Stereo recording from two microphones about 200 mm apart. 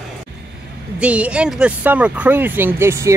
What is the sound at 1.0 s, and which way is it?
Speech, 5° right (ahead or behind).